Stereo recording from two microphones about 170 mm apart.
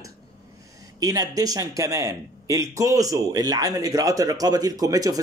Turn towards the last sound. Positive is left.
turn(degrees=-20)  # may be behind; listen again after turning